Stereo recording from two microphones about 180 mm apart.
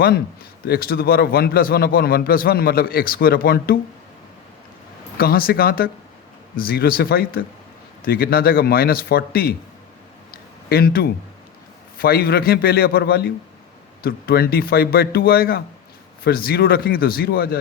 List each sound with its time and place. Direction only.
0.7 s a man's voice: 60° left (ahead or behind)
5.1 s a man's voice: 55° left (ahead or behind)
10.3 s a sound: 60° left (ahead or behind)
11.9 s a man's voice: 55° left (ahead or behind)